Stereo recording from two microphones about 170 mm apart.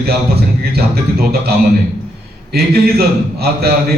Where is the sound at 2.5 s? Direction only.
65° right (ahead or behind).